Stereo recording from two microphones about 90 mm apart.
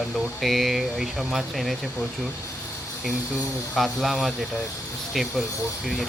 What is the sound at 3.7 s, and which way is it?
Speech, centre (ahead or behind).